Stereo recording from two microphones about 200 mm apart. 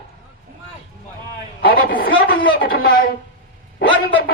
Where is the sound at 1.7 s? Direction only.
45° left (ahead or behind).